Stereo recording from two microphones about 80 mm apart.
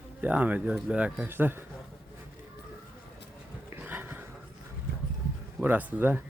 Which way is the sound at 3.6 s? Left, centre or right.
Right.